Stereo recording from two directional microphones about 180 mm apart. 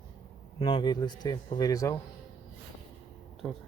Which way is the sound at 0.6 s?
25° left (ahead or behind).